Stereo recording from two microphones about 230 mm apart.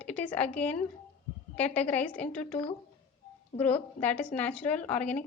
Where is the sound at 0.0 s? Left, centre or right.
Centre.